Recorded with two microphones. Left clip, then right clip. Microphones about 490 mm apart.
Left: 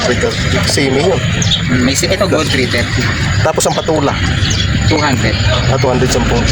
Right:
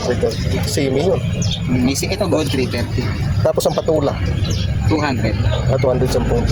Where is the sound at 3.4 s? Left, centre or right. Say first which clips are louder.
Left 2 dB; right.